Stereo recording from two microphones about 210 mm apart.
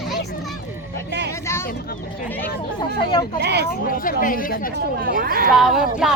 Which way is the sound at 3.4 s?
55° right (ahead or behind).